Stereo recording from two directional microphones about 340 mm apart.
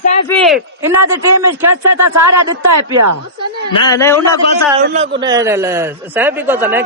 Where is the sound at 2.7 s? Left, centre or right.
Right.